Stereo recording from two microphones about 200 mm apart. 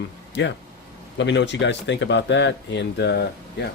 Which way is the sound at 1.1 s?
60° left (ahead or behind).